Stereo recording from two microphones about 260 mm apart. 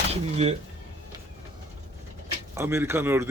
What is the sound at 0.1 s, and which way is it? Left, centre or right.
Speech, right.